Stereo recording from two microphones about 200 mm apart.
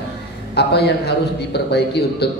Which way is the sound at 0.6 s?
55° left (ahead or behind).